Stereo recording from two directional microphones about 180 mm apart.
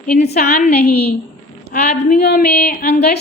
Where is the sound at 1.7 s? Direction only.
45° left (ahead or behind).